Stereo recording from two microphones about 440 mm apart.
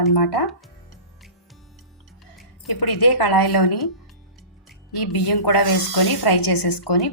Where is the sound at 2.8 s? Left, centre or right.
Left.